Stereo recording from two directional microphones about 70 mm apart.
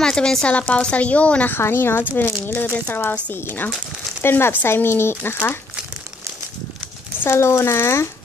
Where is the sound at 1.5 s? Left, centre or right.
Left.